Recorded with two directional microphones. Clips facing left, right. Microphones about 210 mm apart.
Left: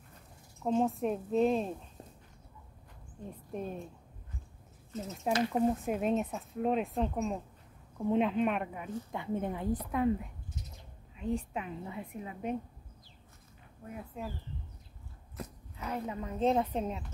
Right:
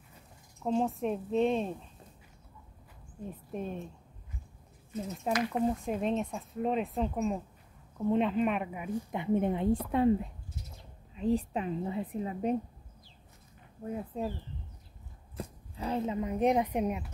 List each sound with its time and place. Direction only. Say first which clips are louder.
0.7 s speech: even; centre (ahead or behind)
3.3 s speech: right 1 dB; centre (ahead or behind)
5.5 s speech: left 1 dB; 5° left (ahead or behind)
8.8 s a woman's voice: right 5 dB; 20° right (ahead or behind)
11.1 s a woman's voice: right 5 dB; 35° right (ahead or behind)
13.8 s a woman's voice: right 7 dB; 30° right (ahead or behind)
15.3 s speech: right 3 dB; 30° right (ahead or behind); by 17.0 s 15° right (ahead or behind)